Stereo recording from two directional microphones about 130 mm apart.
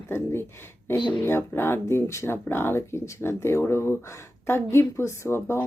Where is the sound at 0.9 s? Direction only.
35° left (ahead or behind).